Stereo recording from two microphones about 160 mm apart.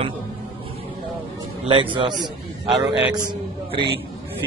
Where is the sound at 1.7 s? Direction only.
30° right (ahead or behind).